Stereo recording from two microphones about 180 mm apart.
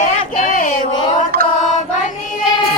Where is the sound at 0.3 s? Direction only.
45° left (ahead or behind).